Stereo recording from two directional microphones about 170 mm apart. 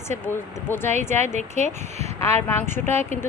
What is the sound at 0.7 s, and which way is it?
Speech, 15° left (ahead or behind).